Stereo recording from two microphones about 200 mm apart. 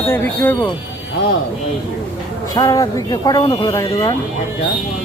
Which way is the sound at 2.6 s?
20° left (ahead or behind).